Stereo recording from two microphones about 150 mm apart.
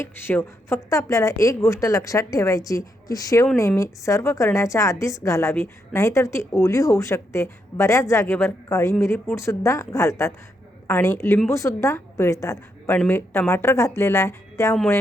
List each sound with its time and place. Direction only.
0.0 s a woman's voice: 15° left (ahead or behind)